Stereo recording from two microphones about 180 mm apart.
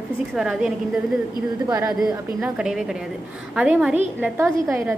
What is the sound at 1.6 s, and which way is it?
Speech, 20° right (ahead or behind).